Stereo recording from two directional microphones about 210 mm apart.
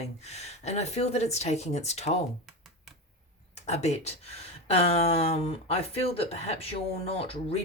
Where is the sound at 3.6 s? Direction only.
30° left (ahead or behind).